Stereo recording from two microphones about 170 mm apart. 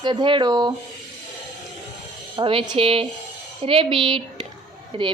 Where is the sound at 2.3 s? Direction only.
30° right (ahead or behind).